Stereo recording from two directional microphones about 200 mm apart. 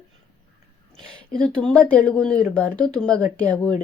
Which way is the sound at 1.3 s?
5° left (ahead or behind).